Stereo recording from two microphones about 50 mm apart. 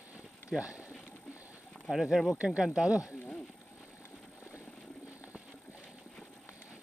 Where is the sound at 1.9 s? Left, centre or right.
Centre.